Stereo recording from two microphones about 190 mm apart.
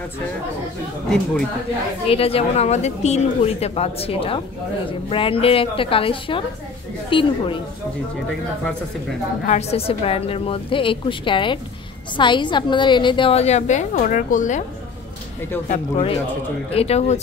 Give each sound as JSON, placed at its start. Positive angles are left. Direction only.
{"t": 1.0, "sound": "speech", "side_deg": 5}
{"t": 2.0, "sound": "a woman's voice", "side_deg": 30}
{"t": 9.5, "sound": "a woman's voice", "side_deg": 35}
{"t": 15.7, "sound": "a woman's voice", "side_deg": 35}